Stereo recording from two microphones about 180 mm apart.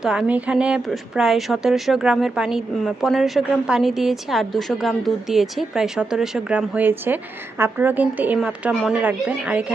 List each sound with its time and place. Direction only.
0.0 s a woman's voice: 5° right (ahead or behind)